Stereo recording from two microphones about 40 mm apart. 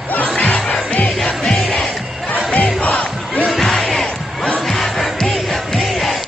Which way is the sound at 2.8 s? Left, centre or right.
Left.